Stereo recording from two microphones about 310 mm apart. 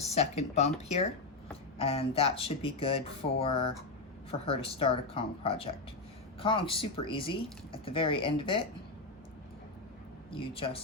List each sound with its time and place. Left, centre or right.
0.1 s speech: left
10.3 s speech: centre